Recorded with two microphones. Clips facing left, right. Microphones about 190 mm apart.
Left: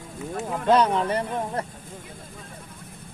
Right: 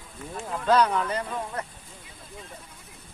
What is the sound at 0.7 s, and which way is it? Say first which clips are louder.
Speech: left 2 dB; 25° left (ahead or behind).